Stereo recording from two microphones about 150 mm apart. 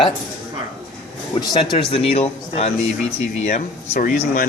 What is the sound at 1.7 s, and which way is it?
Speech, 40° left (ahead or behind).